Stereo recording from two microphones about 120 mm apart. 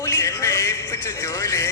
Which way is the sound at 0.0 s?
25° left (ahead or behind).